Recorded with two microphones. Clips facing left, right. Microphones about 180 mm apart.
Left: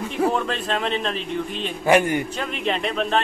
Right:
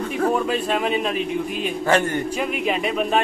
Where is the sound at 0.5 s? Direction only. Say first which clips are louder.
Right 3 dB; 10° right (ahead or behind).